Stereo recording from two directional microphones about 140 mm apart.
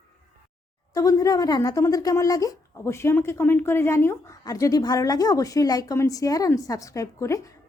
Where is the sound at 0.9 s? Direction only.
25° left (ahead or behind).